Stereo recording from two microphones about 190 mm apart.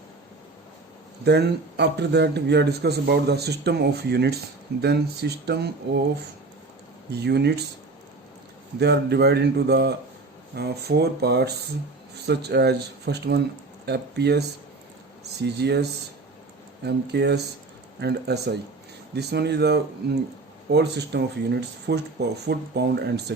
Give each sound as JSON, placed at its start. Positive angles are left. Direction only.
{"t": 1.2, "sound": "a man's voice", "side_deg": -60}
{"t": 7.1, "sound": "a man's voice", "side_deg": -60}
{"t": 8.8, "sound": "a man's voice", "side_deg": -60}